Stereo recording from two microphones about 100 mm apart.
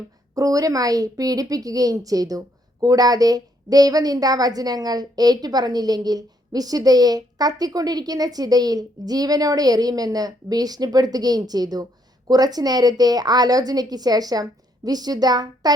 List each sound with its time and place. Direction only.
0.3 s a woman's voice: 35° right (ahead or behind)